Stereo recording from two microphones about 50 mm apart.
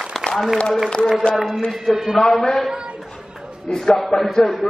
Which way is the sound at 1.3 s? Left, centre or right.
Centre.